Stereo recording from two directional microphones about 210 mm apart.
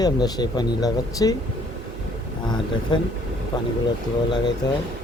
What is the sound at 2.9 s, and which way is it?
Speech, 20° left (ahead or behind).